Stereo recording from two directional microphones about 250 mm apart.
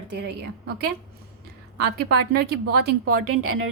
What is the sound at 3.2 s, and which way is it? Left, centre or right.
Speech, right.